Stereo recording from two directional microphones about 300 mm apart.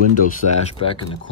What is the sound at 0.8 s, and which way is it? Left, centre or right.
Speech, centre.